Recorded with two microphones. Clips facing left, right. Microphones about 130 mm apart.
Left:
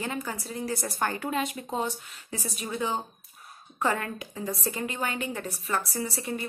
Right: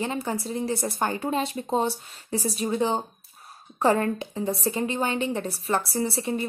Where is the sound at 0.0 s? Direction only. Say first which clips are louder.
Right 5 dB; 25° right (ahead or behind).